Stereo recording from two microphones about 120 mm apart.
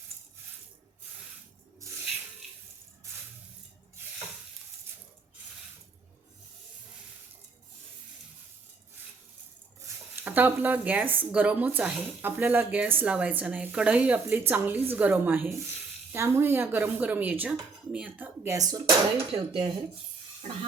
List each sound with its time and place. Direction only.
9.8 s speech: 15° right (ahead or behind)
18.4 s speech: 30° right (ahead or behind)
19.3 s speech: 50° right (ahead or behind)
20.4 s music: 90° right